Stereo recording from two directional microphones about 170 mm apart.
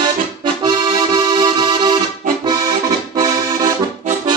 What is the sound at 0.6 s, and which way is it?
Accordion, 25° right (ahead or behind).